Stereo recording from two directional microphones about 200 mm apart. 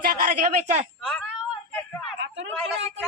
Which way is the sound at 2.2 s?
65° right (ahead or behind).